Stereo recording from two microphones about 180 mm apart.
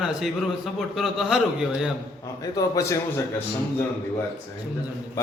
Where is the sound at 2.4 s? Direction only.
20° left (ahead or behind).